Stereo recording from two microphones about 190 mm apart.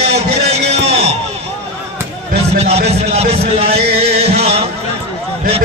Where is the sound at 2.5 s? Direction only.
35° right (ahead or behind).